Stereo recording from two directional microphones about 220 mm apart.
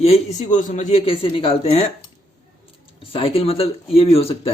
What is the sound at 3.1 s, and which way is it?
Speech, 25° left (ahead or behind).